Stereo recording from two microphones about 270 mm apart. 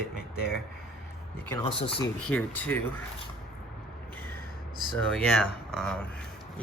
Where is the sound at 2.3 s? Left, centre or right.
Centre.